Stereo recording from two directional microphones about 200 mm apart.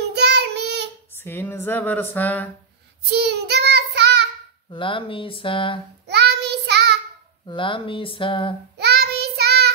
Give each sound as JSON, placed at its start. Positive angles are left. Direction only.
{"t": 0.1, "sound": "child singing", "side_deg": -55}
{"t": 1.1, "sound": "speech", "side_deg": 10}
{"t": 3.1, "sound": "child singing", "side_deg": -55}
{"t": 4.6, "sound": "speech", "side_deg": 25}
{"t": 6.0, "sound": "child singing", "side_deg": -55}
{"t": 7.4, "sound": "speech", "side_deg": 25}
{"t": 8.7, "sound": "child singing", "side_deg": -55}